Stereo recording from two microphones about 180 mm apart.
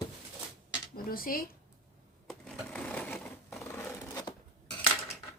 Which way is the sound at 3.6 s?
15° left (ahead or behind).